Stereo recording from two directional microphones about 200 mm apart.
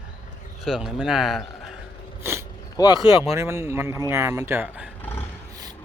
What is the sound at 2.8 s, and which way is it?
Speech, 20° left (ahead or behind).